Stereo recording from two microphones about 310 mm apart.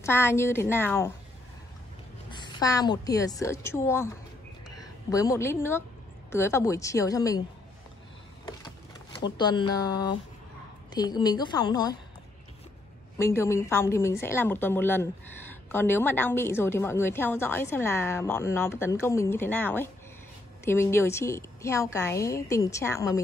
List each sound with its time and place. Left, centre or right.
0.0 s a woman's voice: centre
2.3 s a woman's voice: centre
9.2 s a woman's voice: centre
13.2 s a woman's voice: centre